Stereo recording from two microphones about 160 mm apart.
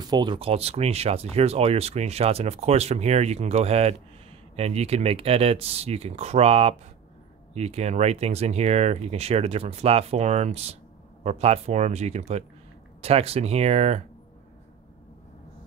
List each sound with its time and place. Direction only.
0.0 s speech: 25° right (ahead or behind); by 14.0 s 45° right (ahead or behind)